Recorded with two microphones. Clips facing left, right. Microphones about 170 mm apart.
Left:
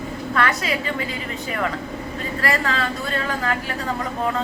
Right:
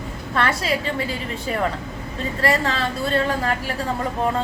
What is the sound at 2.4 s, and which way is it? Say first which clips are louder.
A woman's voice: right 2 dB; 25° right (ahead or behind).